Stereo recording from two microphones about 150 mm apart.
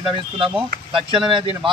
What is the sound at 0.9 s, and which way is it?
Speech, 35° right (ahead or behind).